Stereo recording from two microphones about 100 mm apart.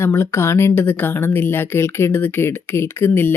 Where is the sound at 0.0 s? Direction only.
25° left (ahead or behind).